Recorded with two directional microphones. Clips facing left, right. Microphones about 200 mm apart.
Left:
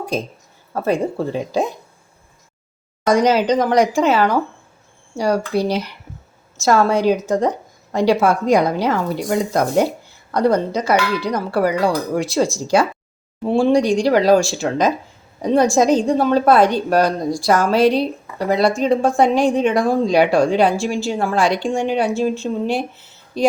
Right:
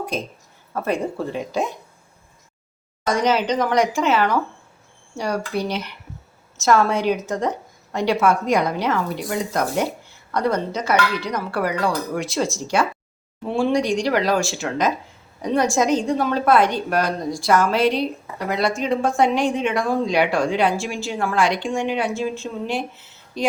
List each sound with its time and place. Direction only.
0.7 s a woman's voice: 35° left (ahead or behind)
3.2 s a woman's voice: 35° left (ahead or behind)